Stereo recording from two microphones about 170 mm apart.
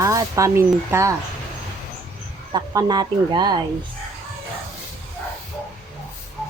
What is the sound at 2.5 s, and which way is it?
Speech, 25° right (ahead or behind).